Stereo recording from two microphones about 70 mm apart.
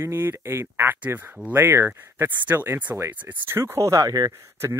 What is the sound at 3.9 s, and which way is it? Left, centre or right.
Speech, right.